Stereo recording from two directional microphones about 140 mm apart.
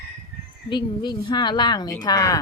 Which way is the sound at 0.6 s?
35° left (ahead or behind).